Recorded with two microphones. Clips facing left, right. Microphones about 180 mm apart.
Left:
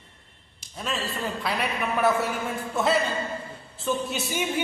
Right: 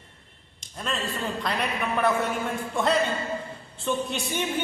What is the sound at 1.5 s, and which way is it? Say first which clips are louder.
Speech: left 1 dB; 5° left (ahead or behind).